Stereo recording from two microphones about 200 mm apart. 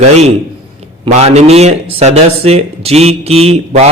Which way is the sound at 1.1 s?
35° right (ahead or behind).